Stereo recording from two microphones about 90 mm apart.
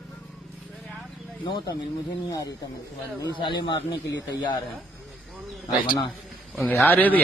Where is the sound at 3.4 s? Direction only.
60° left (ahead or behind).